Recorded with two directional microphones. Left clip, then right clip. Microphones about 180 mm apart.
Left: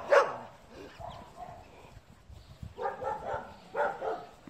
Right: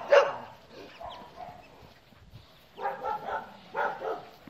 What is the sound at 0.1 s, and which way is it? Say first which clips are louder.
Dog: right 3 dB; 90° left.